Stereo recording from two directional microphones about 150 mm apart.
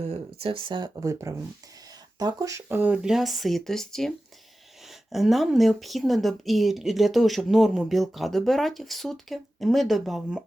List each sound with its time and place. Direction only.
0.0 s speech: 40° right (ahead or behind); by 4.1 s 5° left (ahead or behind)
5.1 s speech: centre (ahead or behind)